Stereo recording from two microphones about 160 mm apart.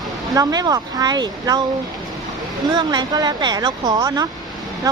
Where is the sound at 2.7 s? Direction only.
25° right (ahead or behind).